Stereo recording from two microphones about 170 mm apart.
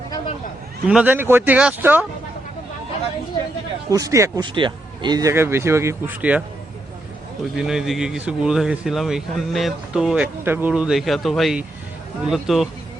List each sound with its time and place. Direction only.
0.9 s speech: 10° right (ahead or behind)
3.8 s speech: 20° right (ahead or behind)
7.5 s speech: 5° right (ahead or behind)